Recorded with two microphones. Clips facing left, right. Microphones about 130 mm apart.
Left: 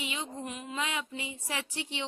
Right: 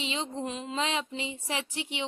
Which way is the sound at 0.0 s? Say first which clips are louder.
Right 4 dB; 25° right (ahead or behind).